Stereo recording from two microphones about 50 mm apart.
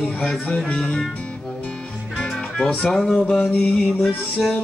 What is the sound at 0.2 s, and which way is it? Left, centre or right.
Music, centre.